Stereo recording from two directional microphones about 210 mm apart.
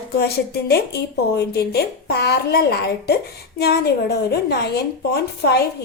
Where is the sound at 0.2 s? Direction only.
50° left (ahead or behind).